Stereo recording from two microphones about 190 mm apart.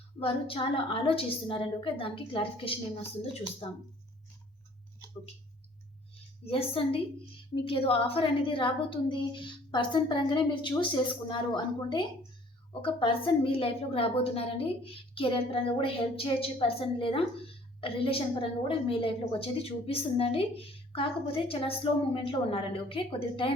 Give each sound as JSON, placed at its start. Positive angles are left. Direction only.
{"t": 0.2, "sound": "a woman's voice", "side_deg": 30}
{"t": 6.4, "sound": "a woman's voice", "side_deg": 30}